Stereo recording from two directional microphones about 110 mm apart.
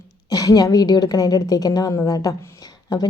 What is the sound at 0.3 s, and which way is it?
A woman's voice, 30° left (ahead or behind).